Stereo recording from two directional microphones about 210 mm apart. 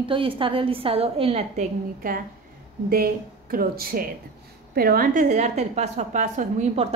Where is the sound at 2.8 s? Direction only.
45° right (ahead or behind).